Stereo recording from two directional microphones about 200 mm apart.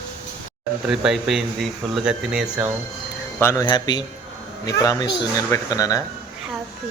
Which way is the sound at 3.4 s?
15° left (ahead or behind).